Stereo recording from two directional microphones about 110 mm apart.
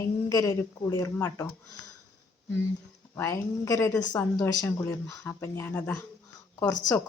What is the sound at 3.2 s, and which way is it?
Speech, 30° left (ahead or behind).